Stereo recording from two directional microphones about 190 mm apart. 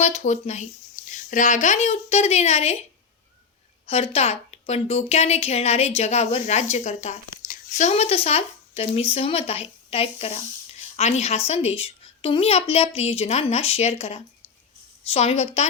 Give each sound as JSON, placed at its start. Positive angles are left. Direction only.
{"t": 0.0, "sound": "speech", "side_deg": 35}
{"t": 3.8, "sound": "speech", "side_deg": 30}